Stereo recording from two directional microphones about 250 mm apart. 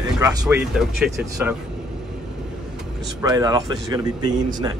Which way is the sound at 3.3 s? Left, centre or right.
Centre.